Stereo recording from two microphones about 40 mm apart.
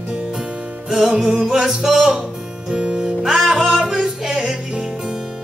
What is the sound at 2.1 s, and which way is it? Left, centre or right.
Music, centre.